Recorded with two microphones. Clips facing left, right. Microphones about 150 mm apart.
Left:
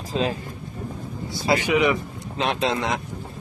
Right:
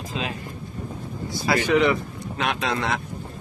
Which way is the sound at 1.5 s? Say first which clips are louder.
Even; 15° left (ahead or behind).